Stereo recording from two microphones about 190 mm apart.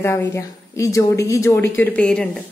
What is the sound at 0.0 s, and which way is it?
A woman's voice, 15° left (ahead or behind).